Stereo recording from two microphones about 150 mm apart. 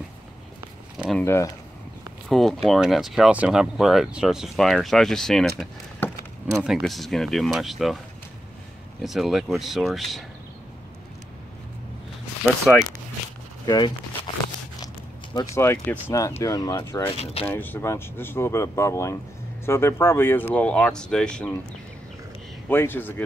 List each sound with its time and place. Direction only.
1.2 s speech: 20° left (ahead or behind)
2.2 s speech: centre (ahead or behind)
9.0 s speech: centre (ahead or behind)
12.4 s speech: 5° right (ahead or behind)
13.7 s speech: 30° left (ahead or behind)
15.3 s speech: 15° left (ahead or behind)
17.2 s speech: 40° left (ahead or behind)
17.5 s speech: 15° left (ahead or behind)
22.7 s speech: 15° left (ahead or behind)